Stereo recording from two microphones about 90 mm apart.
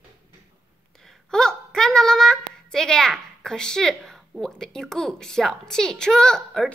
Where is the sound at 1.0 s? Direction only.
5° left (ahead or behind).